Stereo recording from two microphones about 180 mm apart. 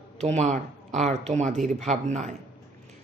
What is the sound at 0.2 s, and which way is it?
A woman's voice, 40° right (ahead or behind).